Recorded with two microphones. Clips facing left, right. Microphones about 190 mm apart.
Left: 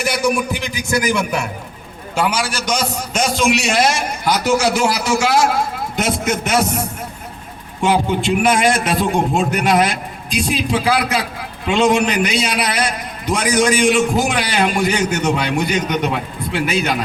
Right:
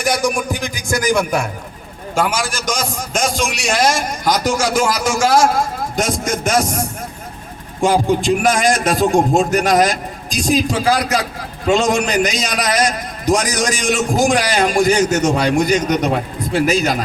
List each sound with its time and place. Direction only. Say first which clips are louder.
0.0 s a man's voice: even; 45° right (ahead or behind)
7.8 s a man's voice: right 2 dB; 45° right (ahead or behind)